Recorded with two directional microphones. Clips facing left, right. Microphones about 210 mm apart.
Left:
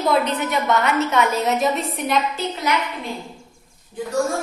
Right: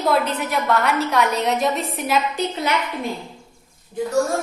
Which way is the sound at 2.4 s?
15° right (ahead or behind).